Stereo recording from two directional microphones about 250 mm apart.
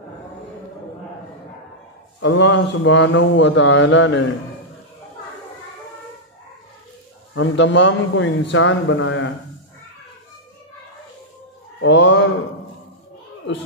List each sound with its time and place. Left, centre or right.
2.1 s a man's voice: left
7.3 s a man's voice: left
11.8 s a man's voice: left